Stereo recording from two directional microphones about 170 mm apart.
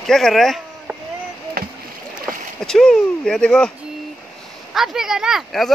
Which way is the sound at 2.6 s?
5° left (ahead or behind).